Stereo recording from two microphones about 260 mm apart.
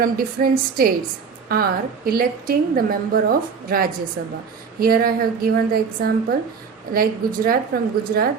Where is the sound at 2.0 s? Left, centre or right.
Right.